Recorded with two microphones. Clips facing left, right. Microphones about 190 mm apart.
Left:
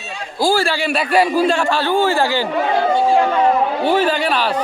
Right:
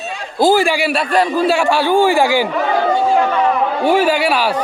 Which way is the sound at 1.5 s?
10° right (ahead or behind).